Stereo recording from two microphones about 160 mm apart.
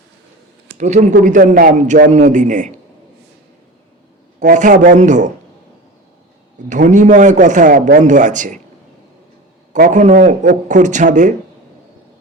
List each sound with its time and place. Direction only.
0.8 s speech: 50° right (ahead or behind)
4.4 s speech: 50° right (ahead or behind)
6.7 s speech: 50° right (ahead or behind)
9.7 s speech: 55° right (ahead or behind)